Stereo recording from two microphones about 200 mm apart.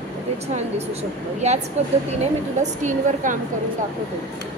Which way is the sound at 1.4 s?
35° right (ahead or behind).